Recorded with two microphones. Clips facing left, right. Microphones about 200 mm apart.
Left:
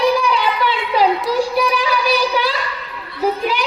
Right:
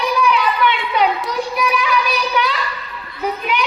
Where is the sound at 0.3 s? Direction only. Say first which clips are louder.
Right 1 dB; 30° left (ahead or behind).